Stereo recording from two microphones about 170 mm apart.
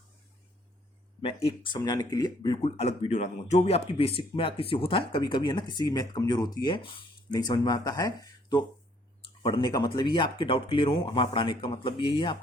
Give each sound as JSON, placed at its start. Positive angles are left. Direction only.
{"t": 1.2, "sound": "speech", "side_deg": 30}
{"t": 2.6, "sound": "speech", "side_deg": 35}